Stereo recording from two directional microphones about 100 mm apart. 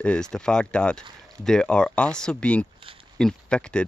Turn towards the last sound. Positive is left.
turn(degrees=10)  # may be behind; listen again after turning